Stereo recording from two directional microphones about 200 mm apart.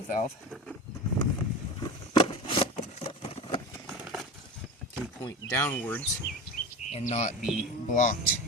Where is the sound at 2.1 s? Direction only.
25° left (ahead or behind).